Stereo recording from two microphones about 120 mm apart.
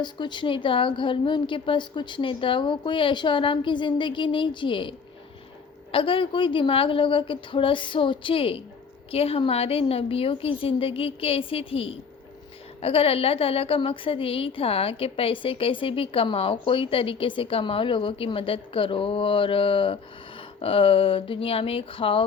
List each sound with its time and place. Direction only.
0.0 s a woman's voice: 40° left (ahead or behind)